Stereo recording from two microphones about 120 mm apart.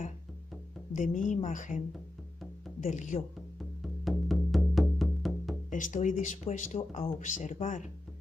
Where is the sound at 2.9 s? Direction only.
90° left.